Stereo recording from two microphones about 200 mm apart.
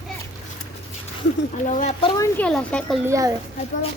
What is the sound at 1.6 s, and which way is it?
Speech, 40° left (ahead or behind).